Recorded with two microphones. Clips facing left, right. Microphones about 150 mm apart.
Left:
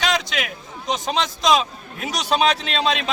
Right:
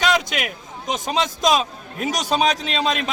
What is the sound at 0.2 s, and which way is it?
A man's voice, 50° right (ahead or behind).